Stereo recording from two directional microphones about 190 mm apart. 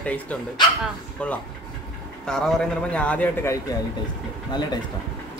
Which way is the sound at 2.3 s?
Centre (ahead or behind).